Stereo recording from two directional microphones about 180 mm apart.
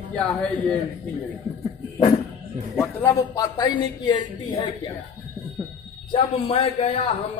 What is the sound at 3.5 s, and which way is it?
A woman's voice, 25° left (ahead or behind).